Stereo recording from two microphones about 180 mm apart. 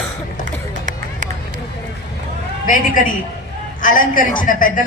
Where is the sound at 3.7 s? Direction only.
50° left (ahead or behind).